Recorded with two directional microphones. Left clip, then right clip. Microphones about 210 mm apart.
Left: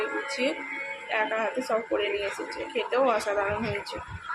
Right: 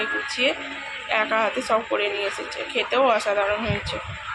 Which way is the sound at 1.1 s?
5° right (ahead or behind).